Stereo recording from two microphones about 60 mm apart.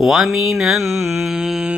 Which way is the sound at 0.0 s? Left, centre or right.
Centre.